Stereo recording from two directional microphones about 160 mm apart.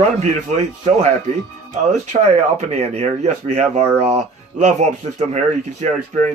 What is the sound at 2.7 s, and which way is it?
Speech, 45° right (ahead or behind).